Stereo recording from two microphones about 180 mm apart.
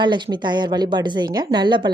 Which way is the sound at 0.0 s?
25° right (ahead or behind).